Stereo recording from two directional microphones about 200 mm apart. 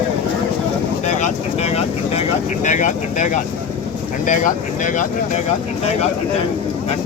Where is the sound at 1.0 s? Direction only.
35° left (ahead or behind).